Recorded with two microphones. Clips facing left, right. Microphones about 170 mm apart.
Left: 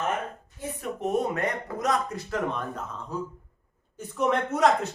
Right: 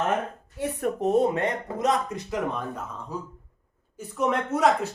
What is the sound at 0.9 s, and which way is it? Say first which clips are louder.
Speech: right 4 dB; 30° right (ahead or behind).